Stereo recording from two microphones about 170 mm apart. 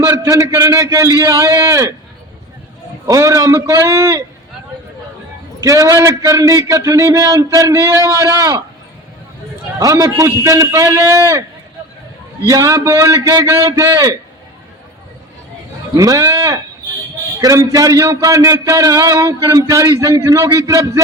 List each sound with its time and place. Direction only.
0.0 s a sound: 15° right (ahead or behind)
3.1 s a man's voice: 20° right (ahead or behind)
5.5 s a man's voice: 20° right (ahead or behind)
9.8 s a man's voice: 20° right (ahead or behind)
12.5 s a man's voice: 20° right (ahead or behind)
16.0 s a man's voice: 20° right (ahead or behind)